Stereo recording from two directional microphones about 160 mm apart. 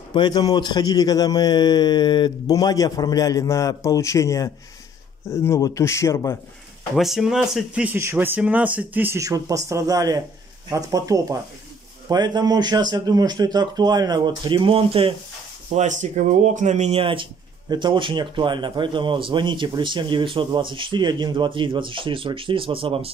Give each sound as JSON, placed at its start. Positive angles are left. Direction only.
{"t": 0.1, "sound": "a man's voice", "side_deg": 25}
{"t": 7.0, "sound": "a man's voice", "side_deg": 0}
{"t": 15.7, "sound": "a man's voice", "side_deg": -45}